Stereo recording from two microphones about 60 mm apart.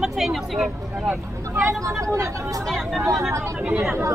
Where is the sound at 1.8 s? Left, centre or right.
Right.